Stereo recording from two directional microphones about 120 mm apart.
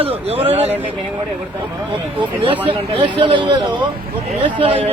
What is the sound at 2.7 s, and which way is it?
Speech, 45° right (ahead or behind).